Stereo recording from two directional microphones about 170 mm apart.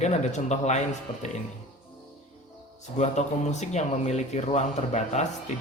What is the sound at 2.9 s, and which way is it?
A man's voice, 40° left (ahead or behind).